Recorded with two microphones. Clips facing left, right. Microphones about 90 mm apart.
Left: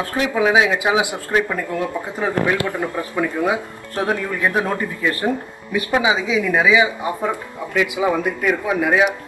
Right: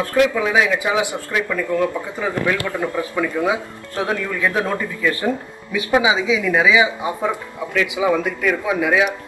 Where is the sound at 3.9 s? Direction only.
20° left (ahead or behind).